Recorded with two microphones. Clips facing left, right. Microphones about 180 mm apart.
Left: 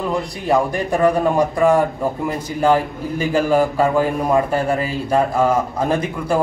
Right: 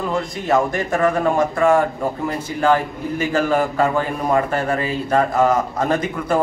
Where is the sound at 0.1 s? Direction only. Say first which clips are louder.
Even; 15° left (ahead or behind).